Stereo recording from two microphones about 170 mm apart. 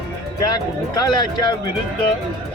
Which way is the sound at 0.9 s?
25° left (ahead or behind).